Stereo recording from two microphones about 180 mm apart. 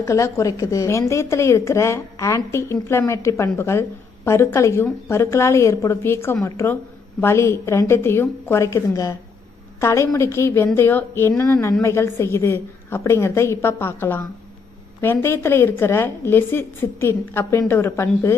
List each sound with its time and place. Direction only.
0.0 s a woman's voice: 15° left (ahead or behind)